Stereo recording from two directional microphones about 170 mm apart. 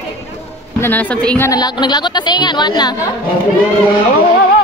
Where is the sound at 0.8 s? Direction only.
10° left (ahead or behind).